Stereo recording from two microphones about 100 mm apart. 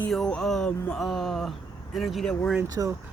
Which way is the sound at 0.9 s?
5° left (ahead or behind).